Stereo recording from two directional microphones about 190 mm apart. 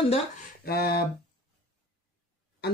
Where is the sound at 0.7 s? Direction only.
55° left (ahead or behind).